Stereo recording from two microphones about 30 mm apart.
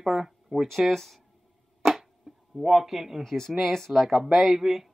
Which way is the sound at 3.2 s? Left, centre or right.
Centre.